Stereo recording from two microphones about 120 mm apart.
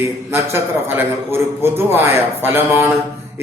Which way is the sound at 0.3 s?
20° right (ahead or behind).